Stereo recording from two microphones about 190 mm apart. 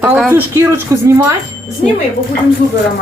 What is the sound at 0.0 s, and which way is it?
Speech, 5° right (ahead or behind).